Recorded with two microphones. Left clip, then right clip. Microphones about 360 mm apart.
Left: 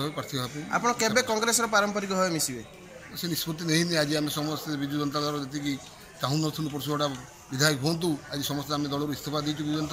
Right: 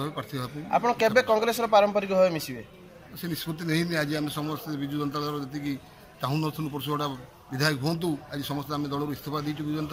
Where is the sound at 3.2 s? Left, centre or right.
Centre.